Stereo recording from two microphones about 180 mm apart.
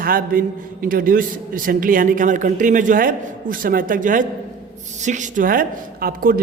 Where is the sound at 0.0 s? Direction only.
50° right (ahead or behind).